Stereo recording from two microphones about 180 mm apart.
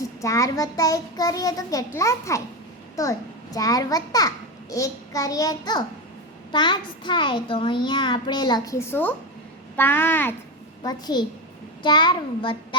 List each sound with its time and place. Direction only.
0.2 s a child's voice: 15° left (ahead or behind)
10.8 s a child's voice: 25° left (ahead or behind)